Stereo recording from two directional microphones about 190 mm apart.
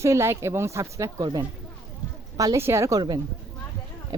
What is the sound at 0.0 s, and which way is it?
A woman's voice, 15° right (ahead or behind).